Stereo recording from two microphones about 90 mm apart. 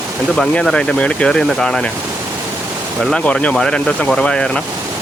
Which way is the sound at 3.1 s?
15° left (ahead or behind).